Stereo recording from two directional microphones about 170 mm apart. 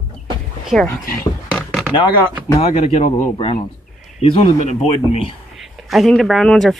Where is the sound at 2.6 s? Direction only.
40° left (ahead or behind).